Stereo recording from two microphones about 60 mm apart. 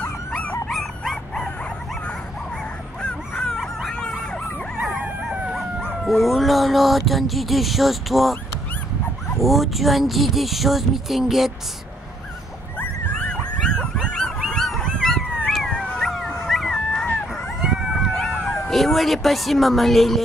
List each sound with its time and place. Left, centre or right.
0.7 s dog: centre
3.0 s dog: centre
4.9 s howl: right
5.8 s speech: centre
9.4 s speech: centre
13.3 s dog: centre
14.5 s honk: centre
14.9 s dog: centre
15.7 s dog: centre
16.4 s dog: centre
17.6 s dog: centre
18.1 s cat: centre